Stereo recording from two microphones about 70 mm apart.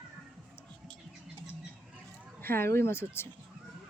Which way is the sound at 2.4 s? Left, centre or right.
Left.